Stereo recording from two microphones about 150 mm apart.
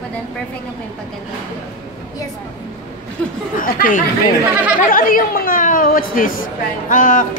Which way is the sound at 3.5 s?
70° left (ahead or behind).